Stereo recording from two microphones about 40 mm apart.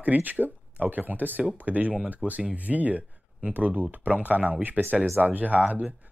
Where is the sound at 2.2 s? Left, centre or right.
Right.